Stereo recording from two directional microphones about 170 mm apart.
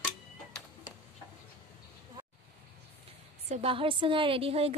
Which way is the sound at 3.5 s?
35° right (ahead or behind).